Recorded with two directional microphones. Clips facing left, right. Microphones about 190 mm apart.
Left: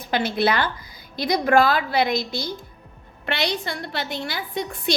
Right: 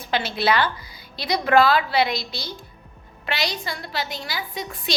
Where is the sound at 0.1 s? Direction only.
55° left (ahead or behind).